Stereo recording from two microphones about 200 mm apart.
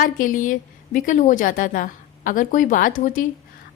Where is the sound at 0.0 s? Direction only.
40° left (ahead or behind).